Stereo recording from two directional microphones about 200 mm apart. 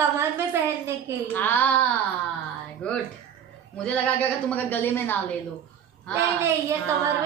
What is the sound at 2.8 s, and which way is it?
Music, 5° left (ahead or behind).